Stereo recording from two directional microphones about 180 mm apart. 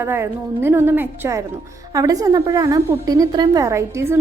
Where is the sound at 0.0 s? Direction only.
10° right (ahead or behind).